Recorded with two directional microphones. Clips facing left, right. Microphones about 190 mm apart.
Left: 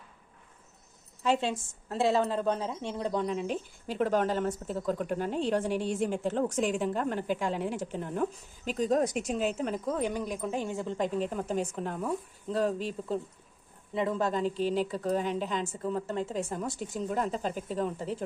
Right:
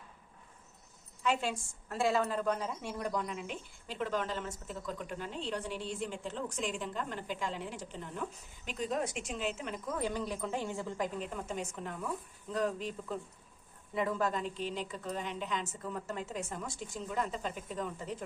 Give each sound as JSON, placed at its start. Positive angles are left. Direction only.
{"t": 1.2, "sound": "a woman's voice", "side_deg": 30}
{"t": 9.9, "sound": "a woman's voice", "side_deg": 15}